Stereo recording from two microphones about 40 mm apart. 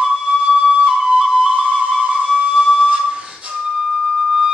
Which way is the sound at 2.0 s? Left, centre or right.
Right.